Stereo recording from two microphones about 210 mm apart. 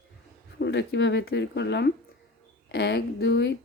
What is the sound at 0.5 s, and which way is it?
Speech, 55° left (ahead or behind).